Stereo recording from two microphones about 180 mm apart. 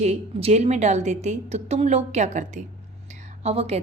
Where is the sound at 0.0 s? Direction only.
35° right (ahead or behind).